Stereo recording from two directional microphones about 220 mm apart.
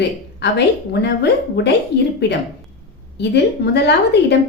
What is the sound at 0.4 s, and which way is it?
A woman's voice, 50° left (ahead or behind).